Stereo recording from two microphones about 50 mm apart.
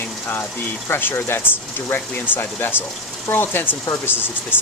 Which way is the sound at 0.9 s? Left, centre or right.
Left.